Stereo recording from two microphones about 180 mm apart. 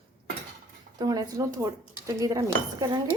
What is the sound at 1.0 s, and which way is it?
A woman's voice, 20° right (ahead or behind).